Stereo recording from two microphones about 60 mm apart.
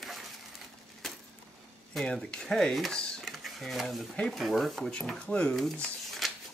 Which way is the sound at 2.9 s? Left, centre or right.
Centre.